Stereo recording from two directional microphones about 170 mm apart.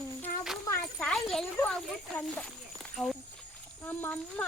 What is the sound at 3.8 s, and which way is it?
Speech, 10° left (ahead or behind).